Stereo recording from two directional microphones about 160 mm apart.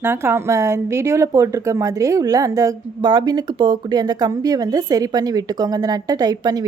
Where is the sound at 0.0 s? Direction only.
15° right (ahead or behind).